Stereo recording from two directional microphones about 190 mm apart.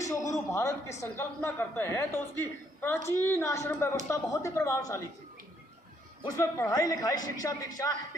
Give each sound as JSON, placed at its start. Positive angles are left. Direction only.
{"t": 0.0, "sound": "a man's voice", "side_deg": 15}
{"t": 6.2, "sound": "a man's voice", "side_deg": 15}